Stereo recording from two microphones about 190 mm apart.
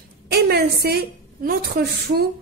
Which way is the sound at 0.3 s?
55° right (ahead or behind).